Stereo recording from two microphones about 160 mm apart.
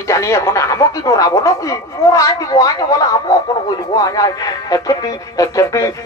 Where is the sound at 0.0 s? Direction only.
20° left (ahead or behind).